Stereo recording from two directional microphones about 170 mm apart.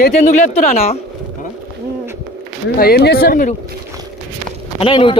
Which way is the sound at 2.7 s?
65° left (ahead or behind).